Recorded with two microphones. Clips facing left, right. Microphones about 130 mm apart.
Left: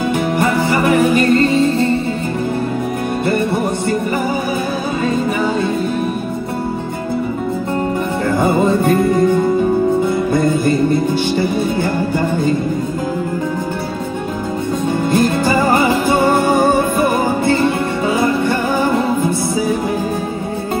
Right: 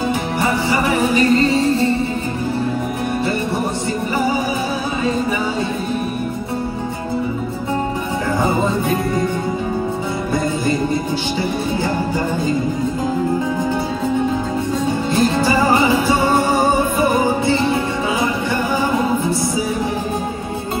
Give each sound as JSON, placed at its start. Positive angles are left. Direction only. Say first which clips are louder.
{"t": 0.4, "sound": "music", "louder": "left 2 dB", "side_deg": 55}
{"t": 8.4, "sound": "music", "louder": "left 5 dB", "side_deg": 55}
{"t": 15.0, "sound": "music", "louder": "left 2 dB", "side_deg": 50}